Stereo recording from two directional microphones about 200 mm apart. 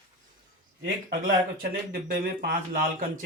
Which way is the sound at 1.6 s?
45° right (ahead or behind).